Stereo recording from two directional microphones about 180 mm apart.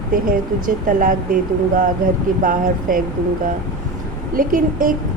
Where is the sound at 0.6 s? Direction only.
50° right (ahead or behind).